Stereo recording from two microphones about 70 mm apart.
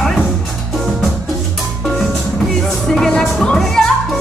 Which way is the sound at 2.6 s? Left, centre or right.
Centre.